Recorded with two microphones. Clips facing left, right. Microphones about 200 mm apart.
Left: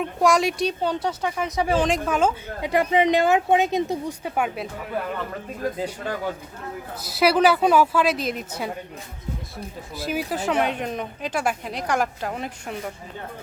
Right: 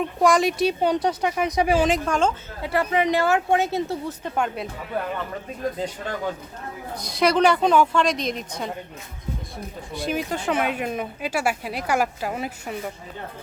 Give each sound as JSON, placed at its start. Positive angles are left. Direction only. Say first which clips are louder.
{"t": 0.2, "sound": "speech", "louder": "right 1 dB", "side_deg": 0}
{"t": 0.8, "sound": "speech", "louder": "right 3 dB", "side_deg": -15}
{"t": 2.0, "sound": "a woman's voice", "louder": "even", "side_deg": 5}
{"t": 2.6, "sound": "a woman's voice", "louder": "left 2 dB", "side_deg": 15}
{"t": 6.9, "sound": "speech", "louder": "even", "side_deg": 5}
{"t": 9.9, "sound": "speech", "louder": "right 1 dB", "side_deg": 5}